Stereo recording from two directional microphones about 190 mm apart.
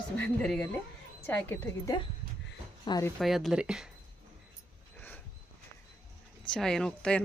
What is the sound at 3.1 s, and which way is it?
Speech, centre (ahead or behind).